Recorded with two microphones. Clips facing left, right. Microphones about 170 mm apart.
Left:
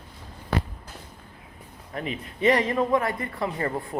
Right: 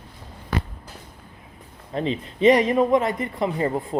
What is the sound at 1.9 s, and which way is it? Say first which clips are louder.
Speech: right 7 dB; 25° right (ahead or behind).